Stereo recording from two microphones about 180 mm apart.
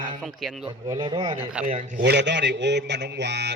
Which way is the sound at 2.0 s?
70° right (ahead or behind).